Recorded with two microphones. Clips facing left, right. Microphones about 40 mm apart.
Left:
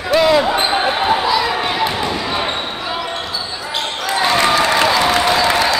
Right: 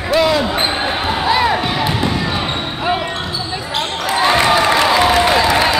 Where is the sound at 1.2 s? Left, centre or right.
Right.